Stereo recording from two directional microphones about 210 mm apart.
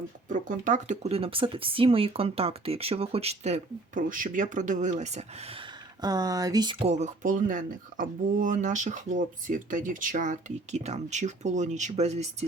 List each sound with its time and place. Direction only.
0.3 s speech: 40° right (ahead or behind)